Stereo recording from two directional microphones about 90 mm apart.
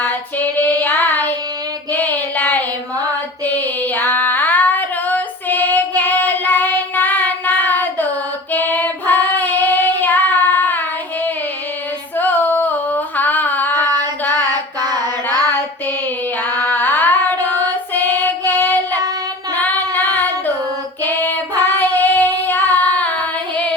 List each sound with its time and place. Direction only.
0.0 s child singing: 20° left (ahead or behind)
3.4 s female singing: 20° left (ahead or behind)
8.5 s child singing: 20° left (ahead or behind)
12.1 s female singing: 20° left (ahead or behind)
14.8 s a sound: 50° right (ahead or behind)
16.4 s female singing: 20° left (ahead or behind)
17.9 s child singing: 25° left (ahead or behind)
19.5 s female singing: 20° left (ahead or behind)
20.1 s singing: 20° left (ahead or behind)
21.0 s female singing: 20° left (ahead or behind)